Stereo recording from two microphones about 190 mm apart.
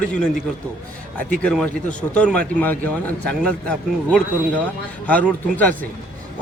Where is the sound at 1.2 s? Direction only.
45° right (ahead or behind).